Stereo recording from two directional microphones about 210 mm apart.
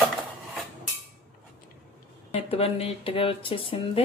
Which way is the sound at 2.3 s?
30° left (ahead or behind).